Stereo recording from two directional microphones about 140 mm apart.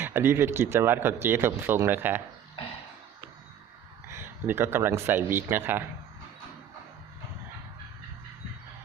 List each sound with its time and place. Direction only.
0.0 s speech: 15° right (ahead or behind)
4.1 s speech: 15° right (ahead or behind)